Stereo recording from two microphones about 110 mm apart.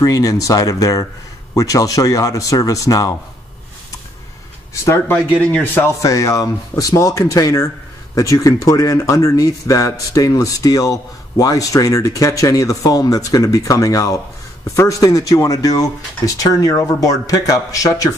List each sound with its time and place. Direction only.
0.0 s speech: 30° left (ahead or behind)
4.8 s speech: 20° left (ahead or behind)